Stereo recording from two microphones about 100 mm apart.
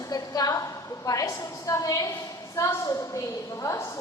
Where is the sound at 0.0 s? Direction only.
35° left (ahead or behind).